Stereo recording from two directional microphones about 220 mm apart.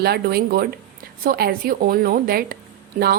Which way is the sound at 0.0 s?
45° right (ahead or behind).